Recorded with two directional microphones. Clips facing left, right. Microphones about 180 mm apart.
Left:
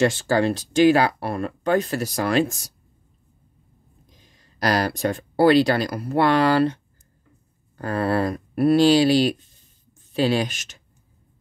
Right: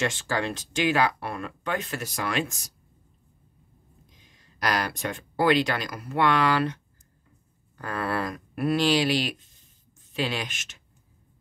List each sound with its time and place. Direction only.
0.0 s speech: 35° left (ahead or behind)
4.1 s speech: 35° left (ahead or behind)